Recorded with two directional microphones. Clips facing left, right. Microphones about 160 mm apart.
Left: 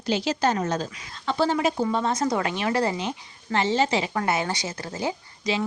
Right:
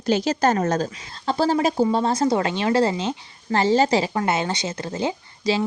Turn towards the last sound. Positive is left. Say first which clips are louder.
# right 4 dB
turn(degrees=-25)  # may be behind; listen again after turning